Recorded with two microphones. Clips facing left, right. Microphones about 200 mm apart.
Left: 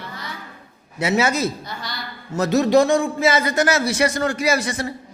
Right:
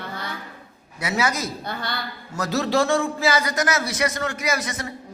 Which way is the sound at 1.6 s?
60° right (ahead or behind).